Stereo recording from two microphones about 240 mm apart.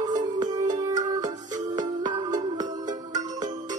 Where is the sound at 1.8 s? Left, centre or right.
Centre.